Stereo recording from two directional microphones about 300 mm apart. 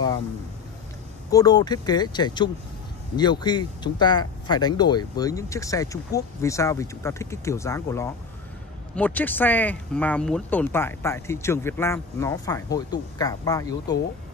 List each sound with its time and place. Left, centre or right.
1.3 s speech: centre